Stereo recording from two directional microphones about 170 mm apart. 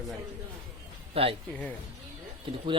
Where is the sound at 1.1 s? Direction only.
35° right (ahead or behind).